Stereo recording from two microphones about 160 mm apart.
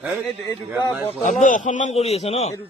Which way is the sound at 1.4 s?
50° left (ahead or behind).